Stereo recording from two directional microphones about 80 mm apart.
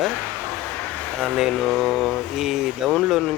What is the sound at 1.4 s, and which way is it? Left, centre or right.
Speech, centre.